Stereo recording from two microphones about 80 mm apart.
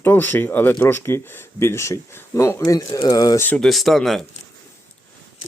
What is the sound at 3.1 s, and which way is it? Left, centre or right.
Speech, left.